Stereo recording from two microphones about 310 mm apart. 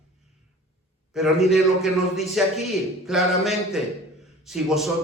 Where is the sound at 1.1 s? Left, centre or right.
Centre.